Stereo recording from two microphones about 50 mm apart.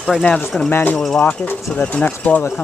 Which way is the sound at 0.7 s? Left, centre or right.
Left.